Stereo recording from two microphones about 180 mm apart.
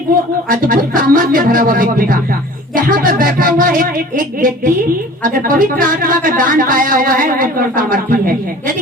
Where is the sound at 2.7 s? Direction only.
50° right (ahead or behind).